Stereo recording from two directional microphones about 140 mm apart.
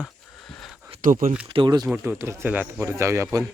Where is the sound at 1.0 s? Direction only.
75° right (ahead or behind).